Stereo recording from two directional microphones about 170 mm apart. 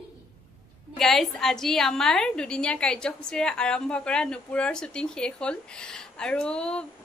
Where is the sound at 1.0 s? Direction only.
Centre (ahead or behind).